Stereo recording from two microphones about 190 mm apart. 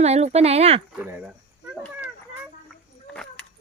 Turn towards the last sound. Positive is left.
turn(degrees=5)  # may be behind; listen again after turning